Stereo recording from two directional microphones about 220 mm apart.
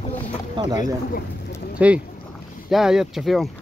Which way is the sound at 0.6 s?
15° right (ahead or behind).